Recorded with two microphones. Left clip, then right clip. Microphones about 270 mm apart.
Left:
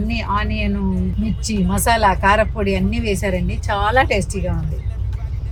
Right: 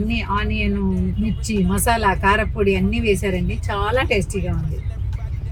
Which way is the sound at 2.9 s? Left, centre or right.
Left.